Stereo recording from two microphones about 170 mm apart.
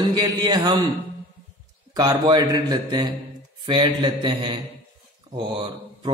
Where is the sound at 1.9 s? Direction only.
25° right (ahead or behind).